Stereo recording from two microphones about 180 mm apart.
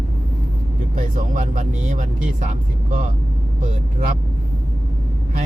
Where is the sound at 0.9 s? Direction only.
45° right (ahead or behind).